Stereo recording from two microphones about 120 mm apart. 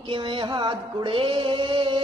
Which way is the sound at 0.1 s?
45° right (ahead or behind).